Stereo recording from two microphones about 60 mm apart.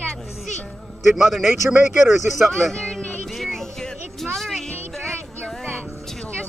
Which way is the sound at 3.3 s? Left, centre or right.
Centre.